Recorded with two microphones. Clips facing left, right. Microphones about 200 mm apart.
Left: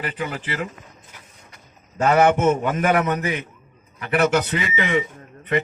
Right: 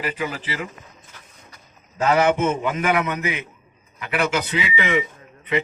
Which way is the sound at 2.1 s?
45° left (ahead or behind).